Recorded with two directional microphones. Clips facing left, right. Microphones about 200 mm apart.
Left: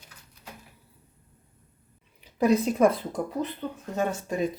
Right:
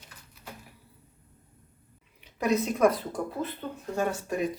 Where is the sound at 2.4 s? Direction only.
30° left (ahead or behind).